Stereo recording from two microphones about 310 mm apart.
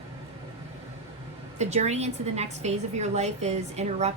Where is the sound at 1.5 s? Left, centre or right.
Right.